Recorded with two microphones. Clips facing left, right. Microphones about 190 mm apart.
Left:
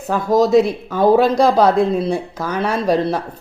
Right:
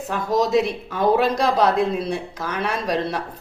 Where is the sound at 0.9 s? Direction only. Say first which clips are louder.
Left 6 dB; 30° left (ahead or behind).